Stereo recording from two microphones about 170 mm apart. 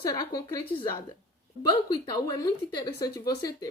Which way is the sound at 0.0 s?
25° left (ahead or behind).